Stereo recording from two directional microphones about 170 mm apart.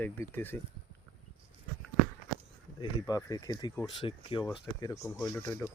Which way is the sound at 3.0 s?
20° left (ahead or behind).